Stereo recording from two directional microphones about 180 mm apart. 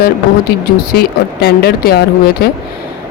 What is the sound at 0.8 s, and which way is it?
Speech, 60° left (ahead or behind).